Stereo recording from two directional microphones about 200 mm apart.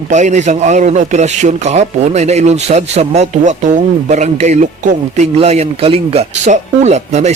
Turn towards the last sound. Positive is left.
turn(degrees=-35)  # may be behind; listen again after turning